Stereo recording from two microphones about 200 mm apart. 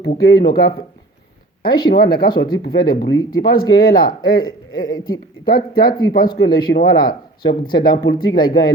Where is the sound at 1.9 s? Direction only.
50° left (ahead or behind).